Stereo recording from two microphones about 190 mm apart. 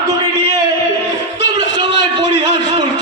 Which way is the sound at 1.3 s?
70° left (ahead or behind).